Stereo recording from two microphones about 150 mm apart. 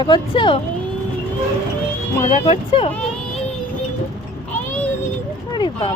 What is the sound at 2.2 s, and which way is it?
Speech, 40° left (ahead or behind).